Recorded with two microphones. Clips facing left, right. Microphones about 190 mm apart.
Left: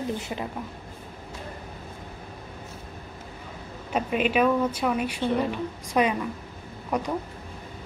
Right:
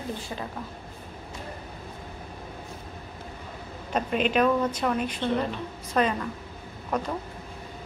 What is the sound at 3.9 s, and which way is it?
A woman's voice, 5° left (ahead or behind).